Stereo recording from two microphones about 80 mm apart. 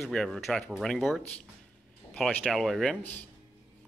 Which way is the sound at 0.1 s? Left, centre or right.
Centre.